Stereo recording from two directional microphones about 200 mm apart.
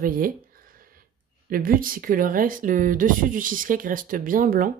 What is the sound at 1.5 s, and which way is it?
Speech, 45° right (ahead or behind).